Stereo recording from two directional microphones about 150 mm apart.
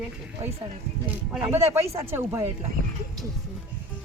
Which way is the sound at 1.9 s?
15° right (ahead or behind).